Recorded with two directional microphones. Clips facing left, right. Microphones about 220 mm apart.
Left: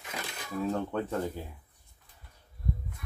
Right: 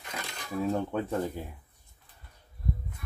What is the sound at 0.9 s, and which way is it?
Speech, 10° right (ahead or behind).